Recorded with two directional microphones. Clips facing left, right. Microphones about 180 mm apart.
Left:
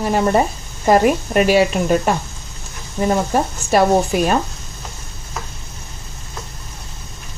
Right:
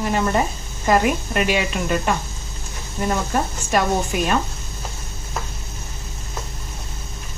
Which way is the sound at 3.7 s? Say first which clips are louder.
Left 7 dB; 35° left (ahead or behind).